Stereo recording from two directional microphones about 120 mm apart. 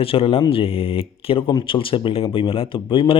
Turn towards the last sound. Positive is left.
turn(degrees=45)  # may be behind; listen again after turning